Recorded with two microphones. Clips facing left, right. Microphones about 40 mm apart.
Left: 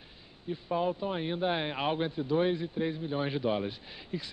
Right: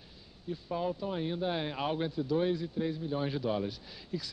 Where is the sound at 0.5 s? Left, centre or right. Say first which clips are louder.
Left 3 dB; left.